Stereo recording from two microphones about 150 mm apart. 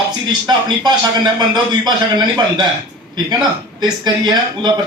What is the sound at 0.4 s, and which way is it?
Speech, 30° right (ahead or behind).